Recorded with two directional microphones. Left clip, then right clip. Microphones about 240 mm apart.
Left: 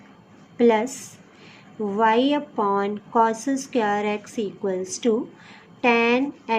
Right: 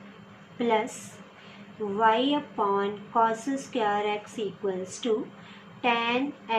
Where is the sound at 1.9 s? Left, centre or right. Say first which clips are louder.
Left 4 dB; left.